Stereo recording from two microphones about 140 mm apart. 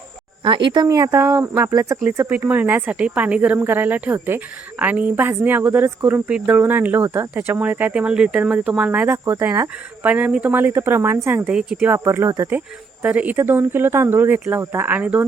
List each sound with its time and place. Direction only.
0.4 s speech: 35° right (ahead or behind); by 11.4 s 15° right (ahead or behind)
11.4 s speech: 5° right (ahead or behind)